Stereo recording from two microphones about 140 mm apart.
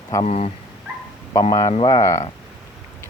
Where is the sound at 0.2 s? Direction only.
50° left (ahead or behind).